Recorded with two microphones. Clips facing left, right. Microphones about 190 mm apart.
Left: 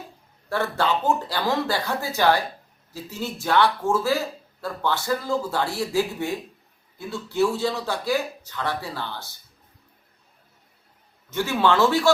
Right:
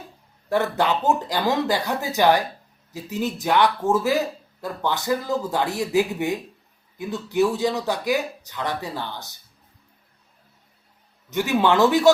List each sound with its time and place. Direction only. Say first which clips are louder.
0.5 s speech: right 2 dB; 15° right (ahead or behind)
11.3 s speech: right 2 dB; 15° right (ahead or behind)